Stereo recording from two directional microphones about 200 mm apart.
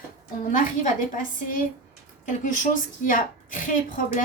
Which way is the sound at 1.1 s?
40° left (ahead or behind).